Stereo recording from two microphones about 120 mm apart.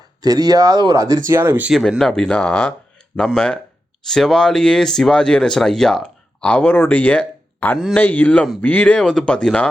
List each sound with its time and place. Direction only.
0.2 s speech: 35° right (ahead or behind)
1.4 s speech: 15° right (ahead or behind)
1.7 s speech: centre (ahead or behind)